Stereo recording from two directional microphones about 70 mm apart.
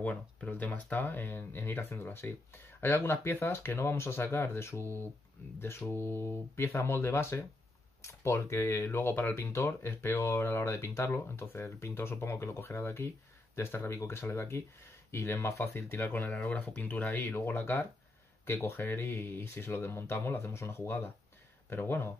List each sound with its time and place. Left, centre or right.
0.0 s speech: centre